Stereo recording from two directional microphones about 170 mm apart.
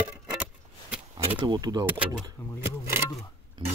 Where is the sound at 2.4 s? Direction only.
10° left (ahead or behind).